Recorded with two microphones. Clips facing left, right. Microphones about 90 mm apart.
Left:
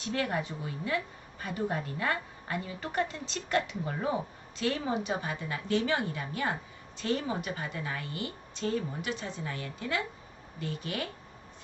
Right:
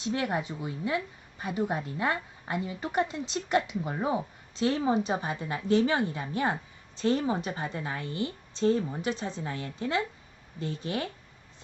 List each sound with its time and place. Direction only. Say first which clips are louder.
0.0 s a woman's voice: right 2 dB; 20° right (ahead or behind)